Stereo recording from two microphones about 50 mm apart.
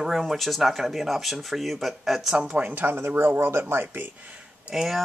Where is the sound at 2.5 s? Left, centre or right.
Right.